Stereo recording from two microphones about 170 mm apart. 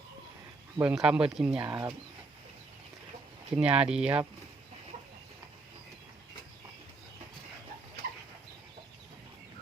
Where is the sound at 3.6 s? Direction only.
5° right (ahead or behind).